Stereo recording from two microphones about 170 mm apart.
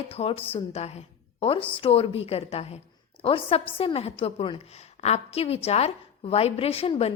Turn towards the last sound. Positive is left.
turn(degrees=35)  # may be behind; listen again after turning